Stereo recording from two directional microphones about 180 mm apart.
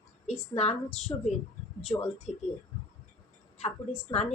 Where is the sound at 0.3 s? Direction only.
35° left (ahead or behind).